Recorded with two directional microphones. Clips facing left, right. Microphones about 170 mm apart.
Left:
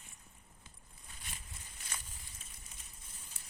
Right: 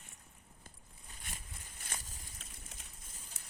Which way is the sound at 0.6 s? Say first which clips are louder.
Right 2 dB; 45° right (ahead or behind).